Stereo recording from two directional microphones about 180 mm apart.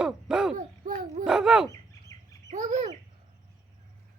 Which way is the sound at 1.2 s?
Centre (ahead or behind).